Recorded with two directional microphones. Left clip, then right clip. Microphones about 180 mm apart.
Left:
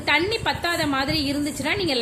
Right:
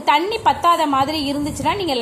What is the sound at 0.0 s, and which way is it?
A woman's voice, centre (ahead or behind).